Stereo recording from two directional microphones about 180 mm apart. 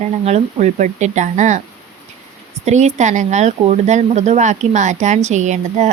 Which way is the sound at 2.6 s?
40° right (ahead or behind).